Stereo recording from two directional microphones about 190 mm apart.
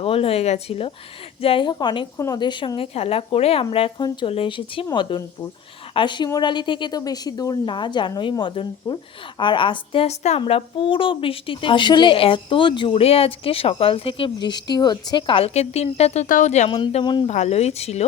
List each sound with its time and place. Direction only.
0.0 s speech: 30° left (ahead or behind)
17.2 s speech: 35° left (ahead or behind)